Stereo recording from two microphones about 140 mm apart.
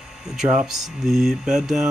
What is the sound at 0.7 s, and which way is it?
Mantra, centre (ahead or behind).